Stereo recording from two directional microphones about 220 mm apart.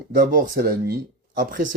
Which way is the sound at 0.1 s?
40° right (ahead or behind).